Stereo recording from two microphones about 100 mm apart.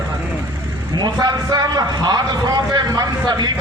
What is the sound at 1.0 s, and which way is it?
A man's voice, 45° right (ahead or behind).